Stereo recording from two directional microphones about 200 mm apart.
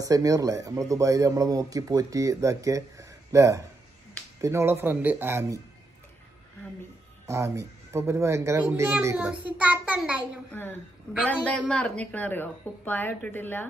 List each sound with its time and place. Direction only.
0.0 s speech: 15° right (ahead or behind)
7.2 s speech: 15° right (ahead or behind)
10.5 s a woman's voice: 10° left (ahead or behind)